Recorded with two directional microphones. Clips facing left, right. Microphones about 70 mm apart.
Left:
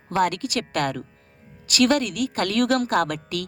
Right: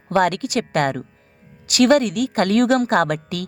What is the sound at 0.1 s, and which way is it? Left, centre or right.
Speech, right.